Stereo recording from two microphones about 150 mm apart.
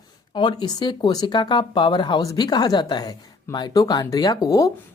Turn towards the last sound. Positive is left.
turn(degrees=25)  # may be behind; listen again after turning